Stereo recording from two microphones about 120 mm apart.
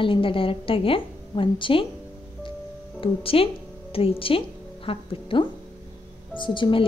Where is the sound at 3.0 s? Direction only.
50° left (ahead or behind).